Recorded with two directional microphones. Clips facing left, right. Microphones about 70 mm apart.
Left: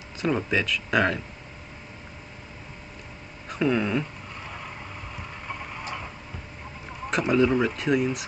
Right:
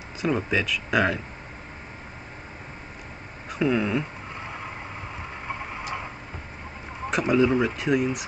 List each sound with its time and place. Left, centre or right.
0.2 s speech: centre
3.4 s speech: centre
4.4 s vehicle: right
7.1 s speech: centre